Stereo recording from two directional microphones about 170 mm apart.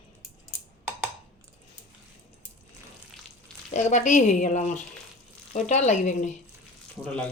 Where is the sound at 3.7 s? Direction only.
45° left (ahead or behind).